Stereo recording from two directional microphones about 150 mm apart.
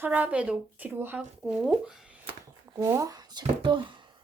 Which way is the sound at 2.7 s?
20° right (ahead or behind).